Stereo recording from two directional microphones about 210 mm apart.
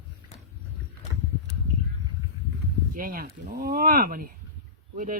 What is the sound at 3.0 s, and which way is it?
Speech, 45° right (ahead or behind).